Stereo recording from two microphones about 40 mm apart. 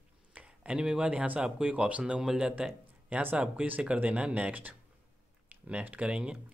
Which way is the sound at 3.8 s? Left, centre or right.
Right.